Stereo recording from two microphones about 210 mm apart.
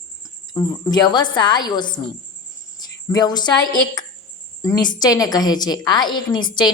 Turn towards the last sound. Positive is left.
turn(degrees=20)  # may be behind; listen again after turning